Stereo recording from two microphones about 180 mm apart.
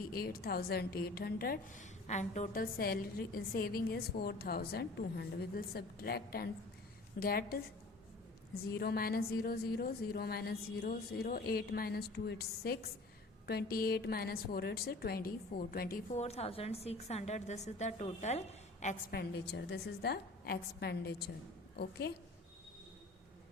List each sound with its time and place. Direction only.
0.1 s a woman's voice: 55° left (ahead or behind)
8.6 s a woman's voice: 60° left (ahead or behind)
16.1 s a woman's voice: 35° left (ahead or behind)
19.1 s a woman's voice: 65° left (ahead or behind)